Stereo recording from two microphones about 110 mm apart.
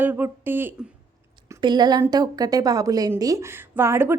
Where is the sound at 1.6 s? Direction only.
40° right (ahead or behind).